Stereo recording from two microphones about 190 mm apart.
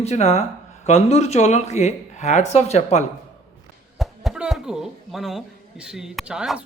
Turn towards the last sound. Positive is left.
turn(degrees=-5)  # may be behind; listen again after turning